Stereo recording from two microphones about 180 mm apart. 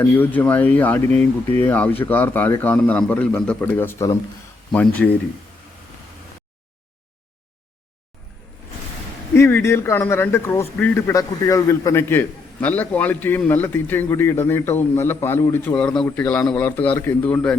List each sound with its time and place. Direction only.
0.0 s a man's voice: 10° left (ahead or behind)
9.3 s a man's voice: 15° left (ahead or behind)